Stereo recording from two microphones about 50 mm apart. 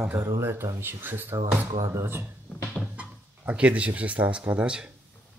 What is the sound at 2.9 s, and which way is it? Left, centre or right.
Speech, right.